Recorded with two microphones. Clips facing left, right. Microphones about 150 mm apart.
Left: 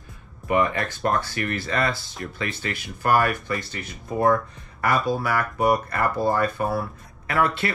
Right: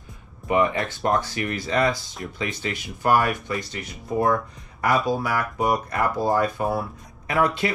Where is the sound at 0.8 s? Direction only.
15° right (ahead or behind).